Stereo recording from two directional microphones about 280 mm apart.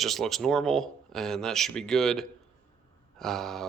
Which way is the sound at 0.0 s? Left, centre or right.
Centre.